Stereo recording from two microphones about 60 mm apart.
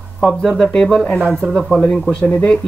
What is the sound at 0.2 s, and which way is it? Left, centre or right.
Speech, centre.